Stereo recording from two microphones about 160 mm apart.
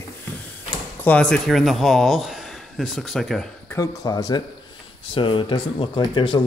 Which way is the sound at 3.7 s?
20° left (ahead or behind).